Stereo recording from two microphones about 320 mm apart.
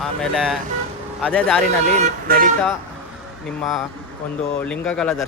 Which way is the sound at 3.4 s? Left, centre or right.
Centre.